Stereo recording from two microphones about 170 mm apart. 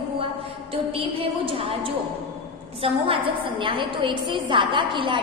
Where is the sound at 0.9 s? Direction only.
35° right (ahead or behind).